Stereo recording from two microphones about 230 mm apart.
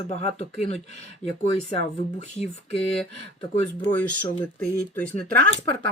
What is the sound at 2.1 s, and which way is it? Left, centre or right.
Speech, left.